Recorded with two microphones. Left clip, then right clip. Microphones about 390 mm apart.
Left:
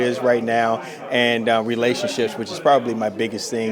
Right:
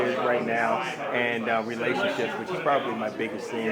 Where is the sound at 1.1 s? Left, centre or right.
Left.